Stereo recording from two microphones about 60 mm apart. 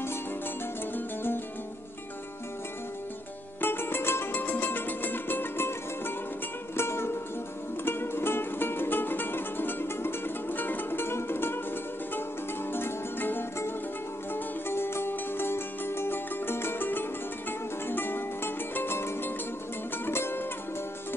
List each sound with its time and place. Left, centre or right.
0.9 s music: left
3.6 s music: left
4.4 s music: left
12.7 s music: left